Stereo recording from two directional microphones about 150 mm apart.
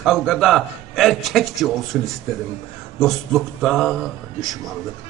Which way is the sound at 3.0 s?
Centre (ahead or behind).